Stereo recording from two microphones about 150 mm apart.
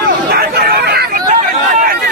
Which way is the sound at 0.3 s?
90° right.